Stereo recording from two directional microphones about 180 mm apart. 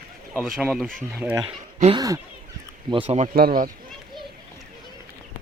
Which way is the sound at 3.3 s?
55° right (ahead or behind).